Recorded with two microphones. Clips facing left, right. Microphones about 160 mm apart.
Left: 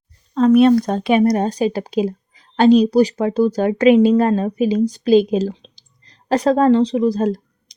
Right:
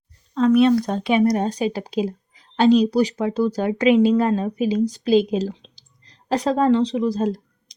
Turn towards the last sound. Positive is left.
turn(degrees=60)  # may be behind; listen again after turning